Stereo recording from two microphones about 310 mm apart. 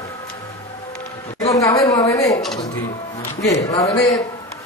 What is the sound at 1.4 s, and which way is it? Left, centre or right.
A man's voice, centre.